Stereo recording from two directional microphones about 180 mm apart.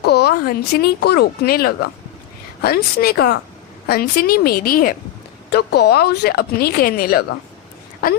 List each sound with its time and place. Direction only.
0.0 s speech: 65° left (ahead or behind)
5.5 s speech: 65° left (ahead or behind)